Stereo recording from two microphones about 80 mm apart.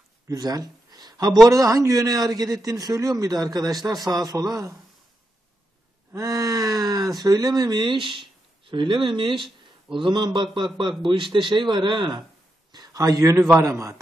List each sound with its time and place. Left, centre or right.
0.3 s a man's voice: right
6.1 s speech: right
12.7 s a man's voice: right